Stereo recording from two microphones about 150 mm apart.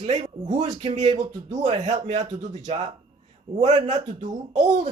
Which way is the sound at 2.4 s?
50° right (ahead or behind).